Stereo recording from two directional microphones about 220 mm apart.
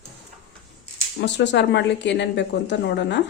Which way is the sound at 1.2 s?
50° left (ahead or behind).